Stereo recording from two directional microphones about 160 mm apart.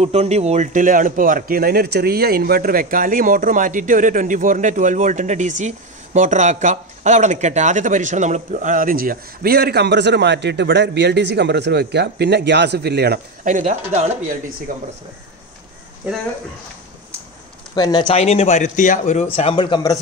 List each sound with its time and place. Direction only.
0.0 s a man's voice: 40° right (ahead or behind); by 13.2 s 90° right
13.4 s speech: 55° right (ahead or behind)
14.7 s a man's voice: 60° right (ahead or behind)
17.7 s speech: 25° left (ahead or behind); by 19.2 s 50° left (ahead or behind)
19.3 s speech: 35° left (ahead or behind)